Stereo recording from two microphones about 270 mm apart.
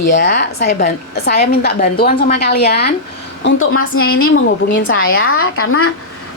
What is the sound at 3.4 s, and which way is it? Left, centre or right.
Speech, left.